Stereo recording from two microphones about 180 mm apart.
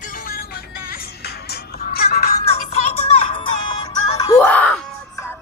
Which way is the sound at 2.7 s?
35° left (ahead or behind).